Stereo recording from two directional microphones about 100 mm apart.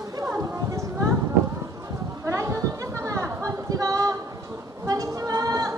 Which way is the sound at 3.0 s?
30° right (ahead or behind).